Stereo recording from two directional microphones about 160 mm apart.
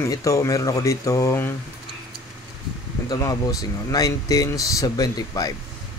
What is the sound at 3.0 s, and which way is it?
Speech, 20° left (ahead or behind).